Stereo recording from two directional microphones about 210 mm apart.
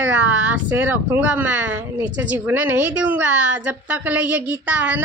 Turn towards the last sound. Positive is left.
turn(degrees=-5)  # may be behind; listen again after turning